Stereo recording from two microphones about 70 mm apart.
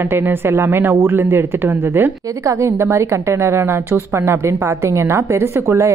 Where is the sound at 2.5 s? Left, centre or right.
Right.